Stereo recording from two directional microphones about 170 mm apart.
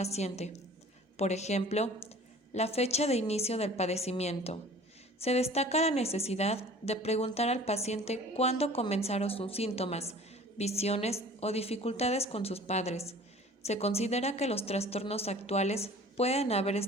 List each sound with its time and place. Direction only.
0.0 s a woman's voice: 40° left (ahead or behind)